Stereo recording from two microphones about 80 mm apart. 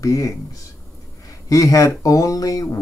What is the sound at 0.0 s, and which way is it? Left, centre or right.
Speech, left.